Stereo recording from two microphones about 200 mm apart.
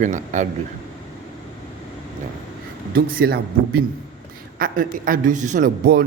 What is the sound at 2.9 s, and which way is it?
A man's voice, 50° right (ahead or behind).